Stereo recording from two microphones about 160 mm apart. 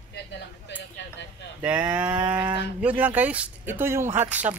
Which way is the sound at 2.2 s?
15° right (ahead or behind).